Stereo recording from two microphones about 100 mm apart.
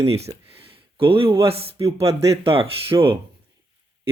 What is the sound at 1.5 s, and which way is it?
Speech, 75° right (ahead or behind).